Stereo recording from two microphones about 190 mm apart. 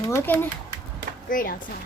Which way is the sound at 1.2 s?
45° left (ahead or behind).